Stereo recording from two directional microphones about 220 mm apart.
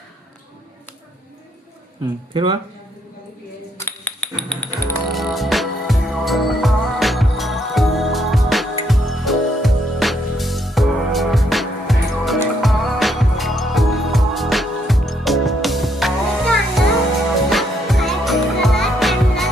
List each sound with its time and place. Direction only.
2.3 s speech: 20° right (ahead or behind)
3.8 s a sound: 10° left (ahead or behind)
5.1 s music: centre (ahead or behind)